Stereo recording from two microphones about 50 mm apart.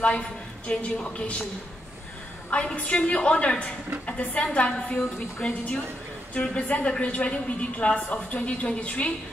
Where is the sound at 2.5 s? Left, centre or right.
Left.